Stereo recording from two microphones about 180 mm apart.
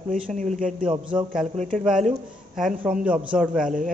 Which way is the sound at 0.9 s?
25° right (ahead or behind).